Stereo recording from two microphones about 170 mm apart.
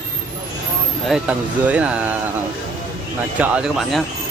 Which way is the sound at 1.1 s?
10° right (ahead or behind).